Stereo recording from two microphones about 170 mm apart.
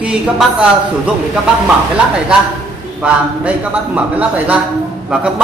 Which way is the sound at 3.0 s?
5° right (ahead or behind).